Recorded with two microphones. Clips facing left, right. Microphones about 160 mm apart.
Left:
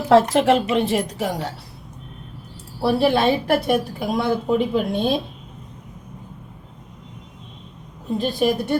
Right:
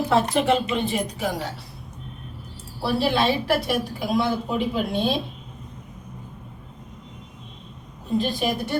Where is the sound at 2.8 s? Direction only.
50° left (ahead or behind).